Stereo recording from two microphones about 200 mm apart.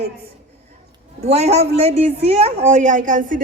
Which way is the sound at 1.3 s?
30° right (ahead or behind).